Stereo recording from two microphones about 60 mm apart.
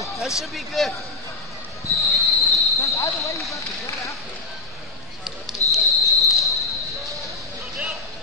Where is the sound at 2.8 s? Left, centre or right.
Left.